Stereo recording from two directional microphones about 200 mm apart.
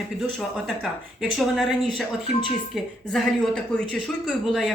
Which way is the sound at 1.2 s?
Centre (ahead or behind).